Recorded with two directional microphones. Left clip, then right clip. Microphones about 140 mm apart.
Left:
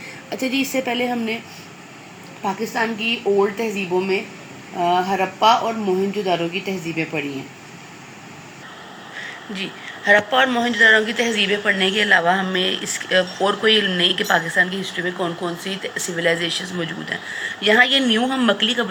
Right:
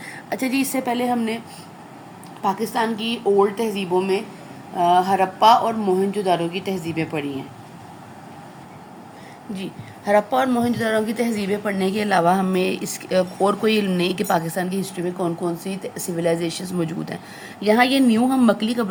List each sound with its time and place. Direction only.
0.4 s a woman's voice: 20° right (ahead or behind)
2.4 s a woman's voice: 10° right (ahead or behind)
9.6 s a woman's voice: 25° right (ahead or behind); by 15.1 s 50° right (ahead or behind)
15.2 s a woman's voice: 5° right (ahead or behind)
15.6 s speech: 40° right (ahead or behind)